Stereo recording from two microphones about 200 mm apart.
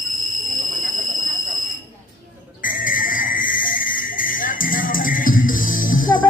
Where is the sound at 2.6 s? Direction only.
45° left (ahead or behind).